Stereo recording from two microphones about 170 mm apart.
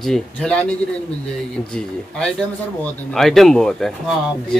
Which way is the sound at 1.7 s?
5° left (ahead or behind).